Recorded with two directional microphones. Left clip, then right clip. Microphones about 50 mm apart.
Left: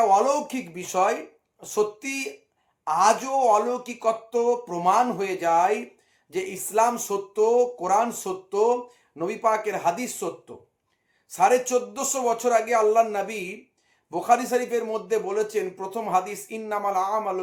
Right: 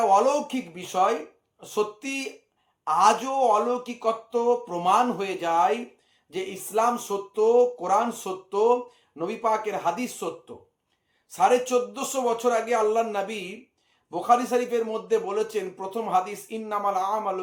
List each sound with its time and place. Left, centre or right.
0.0 s speech: centre
0.3 s speech: left
2.8 s speech: centre
3.2 s speech: left
4.8 s speech: centre
6.3 s speech: left
7.3 s speech: left
8.2 s speech: left
11.3 s speech: left
14.1 s speech: left
15.0 s speech: centre
15.9 s speech: left; by 17.4 s centre